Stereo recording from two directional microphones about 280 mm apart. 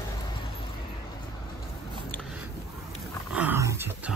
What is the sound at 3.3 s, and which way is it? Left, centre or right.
Dog, centre.